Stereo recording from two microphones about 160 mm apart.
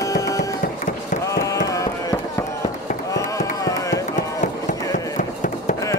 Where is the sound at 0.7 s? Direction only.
50° left (ahead or behind).